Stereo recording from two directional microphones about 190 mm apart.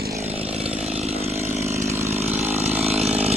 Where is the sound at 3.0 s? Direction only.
35° right (ahead or behind).